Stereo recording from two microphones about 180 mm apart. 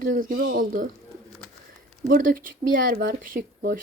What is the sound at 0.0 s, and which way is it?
Speech, 50° right (ahead or behind).